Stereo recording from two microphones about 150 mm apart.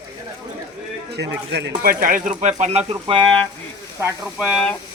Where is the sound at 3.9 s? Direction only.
5° right (ahead or behind).